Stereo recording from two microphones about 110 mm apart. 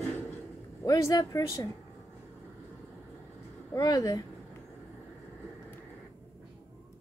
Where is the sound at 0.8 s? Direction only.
30° left (ahead or behind).